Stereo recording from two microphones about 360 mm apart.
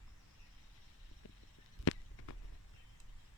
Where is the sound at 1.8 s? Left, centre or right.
Left.